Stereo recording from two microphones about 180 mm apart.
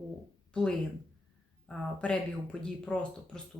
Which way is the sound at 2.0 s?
5° left (ahead or behind).